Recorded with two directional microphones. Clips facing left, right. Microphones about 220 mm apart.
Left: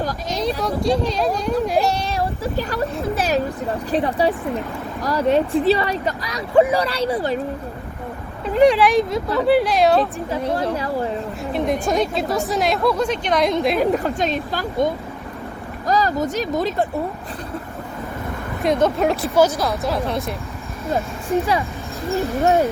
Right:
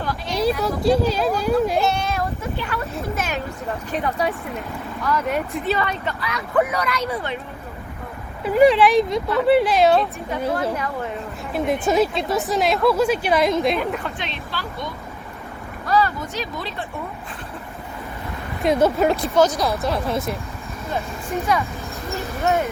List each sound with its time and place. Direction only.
0.0 s speech: 40° left (ahead or behind)
0.6 s a woman's voice: 5° right (ahead or behind)
1.8 s speech: 35° left (ahead or behind)
8.4 s a woman's voice: 5° right (ahead or behind)
10.8 s speech: 30° left (ahead or behind)
11.5 s a woman's voice: centre (ahead or behind)
13.7 s speech: 40° left (ahead or behind)
18.6 s a woman's voice: centre (ahead or behind)
20.9 s speech: 30° left (ahead or behind)